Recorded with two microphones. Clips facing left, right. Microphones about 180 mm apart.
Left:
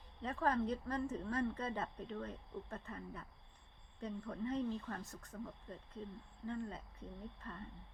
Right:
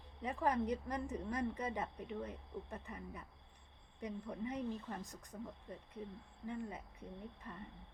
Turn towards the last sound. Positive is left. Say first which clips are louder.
# even
turn(degrees=-15)  # may be behind; listen again after turning